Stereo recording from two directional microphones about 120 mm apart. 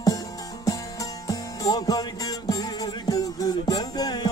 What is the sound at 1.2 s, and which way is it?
Music, 35° left (ahead or behind).